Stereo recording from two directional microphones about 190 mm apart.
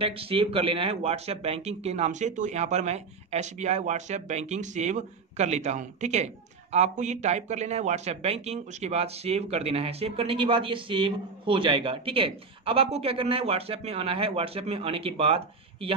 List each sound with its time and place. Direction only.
0.0 s speech: 30° right (ahead or behind)